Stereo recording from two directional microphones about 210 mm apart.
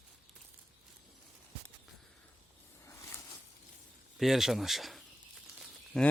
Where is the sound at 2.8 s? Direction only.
15° left (ahead or behind).